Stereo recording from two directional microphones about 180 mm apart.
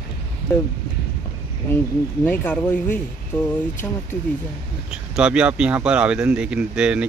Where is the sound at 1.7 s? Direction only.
10° left (ahead or behind).